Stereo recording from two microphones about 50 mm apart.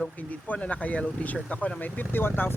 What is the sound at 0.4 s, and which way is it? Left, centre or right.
Speech, left.